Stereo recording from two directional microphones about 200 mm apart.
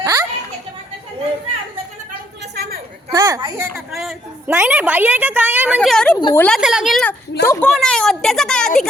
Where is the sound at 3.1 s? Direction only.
15° right (ahead or behind).